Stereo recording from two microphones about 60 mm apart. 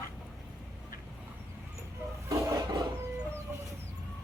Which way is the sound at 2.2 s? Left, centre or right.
Right.